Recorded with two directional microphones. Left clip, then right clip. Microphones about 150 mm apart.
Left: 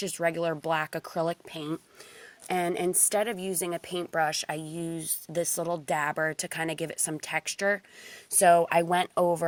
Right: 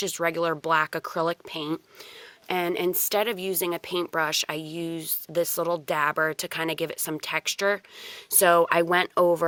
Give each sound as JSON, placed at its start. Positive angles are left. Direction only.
{"t": 0.0, "sound": "speech", "side_deg": -20}